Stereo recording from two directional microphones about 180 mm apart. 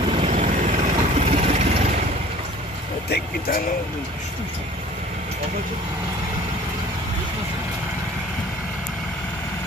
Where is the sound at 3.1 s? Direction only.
55° left (ahead or behind).